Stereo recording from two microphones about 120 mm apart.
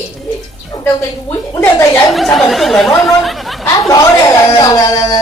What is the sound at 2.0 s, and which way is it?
Speech, centre (ahead or behind).